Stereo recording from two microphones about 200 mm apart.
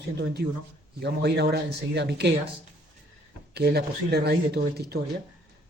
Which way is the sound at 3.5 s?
55° right (ahead or behind).